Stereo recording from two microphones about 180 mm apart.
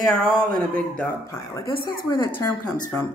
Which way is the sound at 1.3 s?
20° left (ahead or behind).